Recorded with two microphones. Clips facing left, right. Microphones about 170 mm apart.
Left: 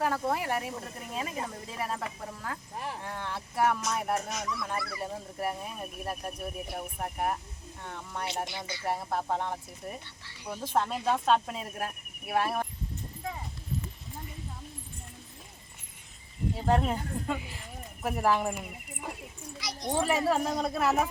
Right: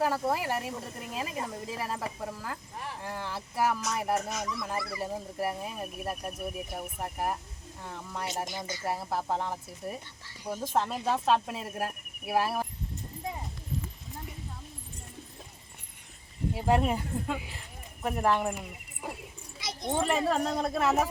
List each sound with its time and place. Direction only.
0.0 s speech: 5° right (ahead or behind)
4.4 s speech: 20° right (ahead or behind)
4.9 s speech: 5° right (ahead or behind)
8.4 s speech: 45° right (ahead or behind)
8.9 s speech: 5° right (ahead or behind)
10.2 s speech: 45° right (ahead or behind)
10.8 s speech: centre (ahead or behind)
16.6 s speech: 10° right (ahead or behind)
19.5 s children playing: 25° right (ahead or behind)
20.0 s speech: 5° left (ahead or behind)